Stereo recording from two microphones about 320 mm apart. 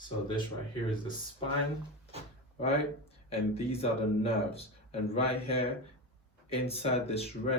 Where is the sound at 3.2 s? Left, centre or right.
Centre.